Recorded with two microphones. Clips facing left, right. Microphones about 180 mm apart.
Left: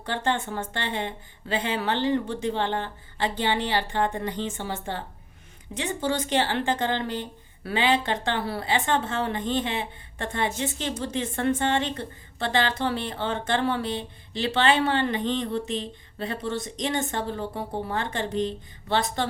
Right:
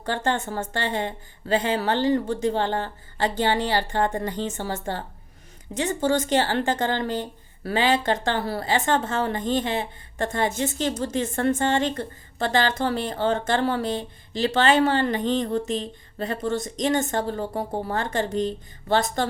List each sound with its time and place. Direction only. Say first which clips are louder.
0.0 s a woman's voice: right 2 dB; 45° right (ahead or behind)